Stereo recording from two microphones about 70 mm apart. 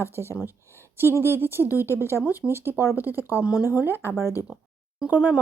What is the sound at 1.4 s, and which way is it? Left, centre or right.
Speech, right.